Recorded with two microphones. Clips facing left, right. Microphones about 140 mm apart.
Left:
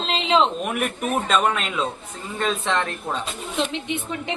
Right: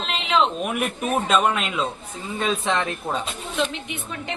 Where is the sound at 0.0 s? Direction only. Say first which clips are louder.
Left 2 dB; 25° left (ahead or behind).